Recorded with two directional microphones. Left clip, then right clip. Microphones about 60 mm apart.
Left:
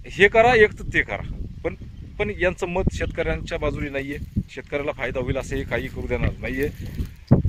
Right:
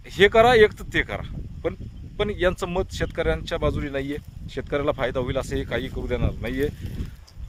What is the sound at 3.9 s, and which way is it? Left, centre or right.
Speech, right.